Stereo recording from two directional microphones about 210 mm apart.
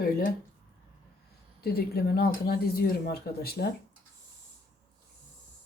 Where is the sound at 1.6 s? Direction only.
50° left (ahead or behind).